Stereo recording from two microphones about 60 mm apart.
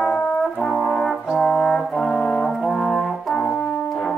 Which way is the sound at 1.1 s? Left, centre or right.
Centre.